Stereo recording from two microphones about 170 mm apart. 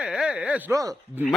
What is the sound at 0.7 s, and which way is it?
Speech, 20° right (ahead or behind).